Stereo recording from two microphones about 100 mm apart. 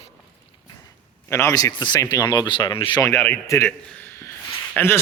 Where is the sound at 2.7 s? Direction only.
60° left (ahead or behind).